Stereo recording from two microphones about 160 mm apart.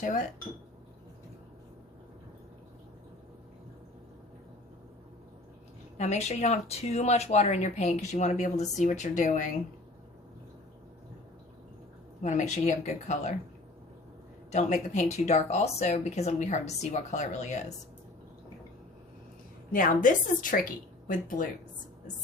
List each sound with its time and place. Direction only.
6.0 s speech: 45° left (ahead or behind)
12.2 s speech: 45° left (ahead or behind)
14.5 s speech: 45° left (ahead or behind)
19.7 s a woman's voice: 55° left (ahead or behind)